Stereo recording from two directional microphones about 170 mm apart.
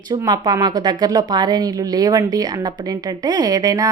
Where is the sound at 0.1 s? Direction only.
20° right (ahead or behind).